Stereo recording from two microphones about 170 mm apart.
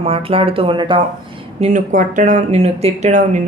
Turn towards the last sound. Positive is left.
turn(degrees=-45)  # may be behind; listen again after turning